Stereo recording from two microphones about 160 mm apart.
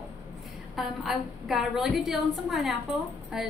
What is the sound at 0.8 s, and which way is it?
A woman's voice, centre (ahead or behind).